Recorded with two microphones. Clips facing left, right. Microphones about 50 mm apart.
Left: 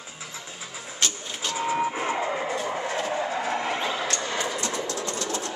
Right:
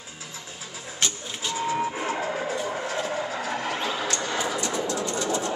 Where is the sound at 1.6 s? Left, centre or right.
Centre.